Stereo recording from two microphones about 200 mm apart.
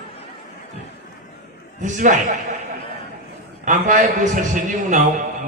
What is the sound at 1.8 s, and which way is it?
Speech, 40° right (ahead or behind).